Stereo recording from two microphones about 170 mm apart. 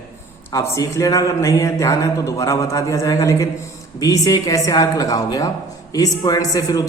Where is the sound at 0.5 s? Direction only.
15° left (ahead or behind).